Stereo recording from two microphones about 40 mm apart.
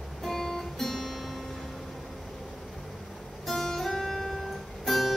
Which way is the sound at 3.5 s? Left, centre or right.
Centre.